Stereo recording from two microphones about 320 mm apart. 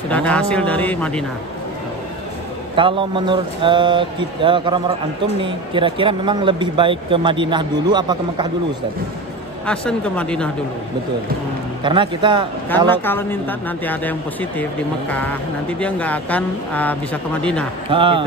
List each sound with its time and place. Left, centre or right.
0.1 s speech: centre
2.7 s speech: centre
9.7 s speech: centre
11.8 s speech: centre
12.6 s speech: centre
17.8 s speech: centre